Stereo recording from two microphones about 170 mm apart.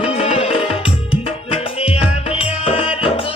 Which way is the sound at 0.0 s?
35° left (ahead or behind).